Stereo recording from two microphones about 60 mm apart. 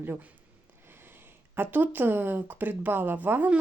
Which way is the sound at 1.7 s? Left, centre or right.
Right.